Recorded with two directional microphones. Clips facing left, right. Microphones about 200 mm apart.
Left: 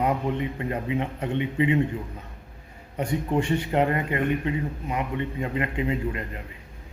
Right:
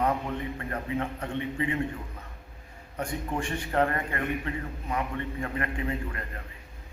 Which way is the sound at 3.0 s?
20° left (ahead or behind).